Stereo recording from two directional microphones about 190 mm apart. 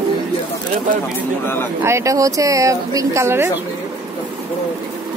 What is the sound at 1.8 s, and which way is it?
A woman's voice, 15° right (ahead or behind).